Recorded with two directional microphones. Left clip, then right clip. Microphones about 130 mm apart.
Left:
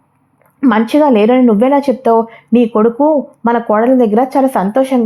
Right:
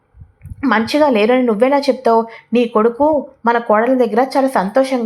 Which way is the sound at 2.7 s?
25° left (ahead or behind).